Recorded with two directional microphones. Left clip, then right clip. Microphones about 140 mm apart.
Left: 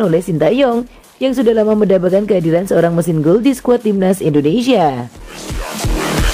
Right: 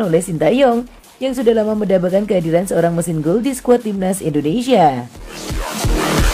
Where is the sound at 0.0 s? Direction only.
35° left (ahead or behind).